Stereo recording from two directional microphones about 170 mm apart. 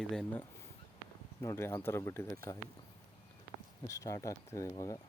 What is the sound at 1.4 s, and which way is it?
Speech, 15° left (ahead or behind).